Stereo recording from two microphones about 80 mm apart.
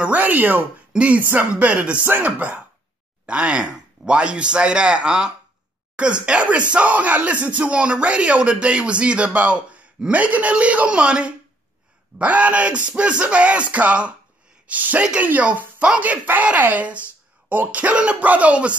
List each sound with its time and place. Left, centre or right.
0.0 s speech: centre